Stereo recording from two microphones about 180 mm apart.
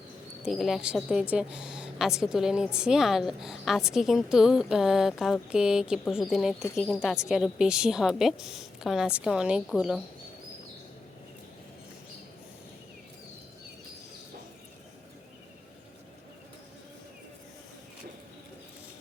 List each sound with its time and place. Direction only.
0.4 s a woman's voice: centre (ahead or behind)